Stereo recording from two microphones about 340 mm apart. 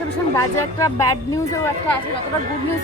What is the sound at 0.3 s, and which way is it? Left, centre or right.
Speech, centre.